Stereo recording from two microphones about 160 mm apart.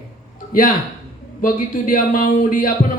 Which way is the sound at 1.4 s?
60° left (ahead or behind).